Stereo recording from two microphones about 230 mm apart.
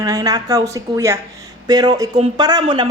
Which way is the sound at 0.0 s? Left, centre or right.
Centre.